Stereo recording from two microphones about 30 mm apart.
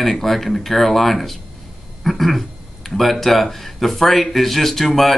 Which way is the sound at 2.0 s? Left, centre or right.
Centre.